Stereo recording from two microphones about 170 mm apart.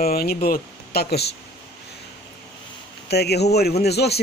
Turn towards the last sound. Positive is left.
turn(degrees=75)  # may be behind; listen again after turning